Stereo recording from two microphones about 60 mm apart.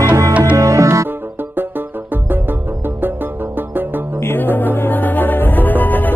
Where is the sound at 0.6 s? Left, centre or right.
Right.